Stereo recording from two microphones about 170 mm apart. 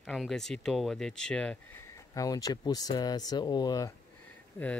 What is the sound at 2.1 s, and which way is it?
Speech, 20° left (ahead or behind).